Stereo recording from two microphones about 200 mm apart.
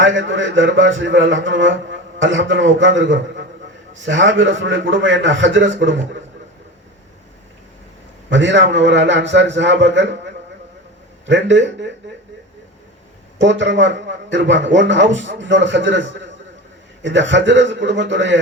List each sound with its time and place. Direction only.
0.0 s speech: 70° right (ahead or behind)
8.3 s a man's voice: 65° right (ahead or behind)
11.3 s a man's voice: 65° right (ahead or behind)
13.4 s a man's voice: 65° right (ahead or behind)